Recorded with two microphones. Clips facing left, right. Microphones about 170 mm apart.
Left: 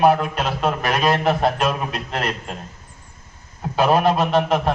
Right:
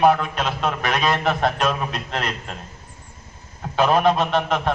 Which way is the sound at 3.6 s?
5° left (ahead or behind).